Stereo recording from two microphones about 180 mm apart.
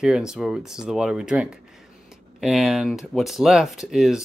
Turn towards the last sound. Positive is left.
turn(degrees=0)  # may be behind; listen again after turning